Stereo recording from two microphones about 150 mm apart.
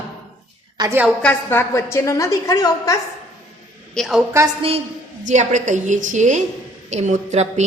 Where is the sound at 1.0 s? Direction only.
10° left (ahead or behind).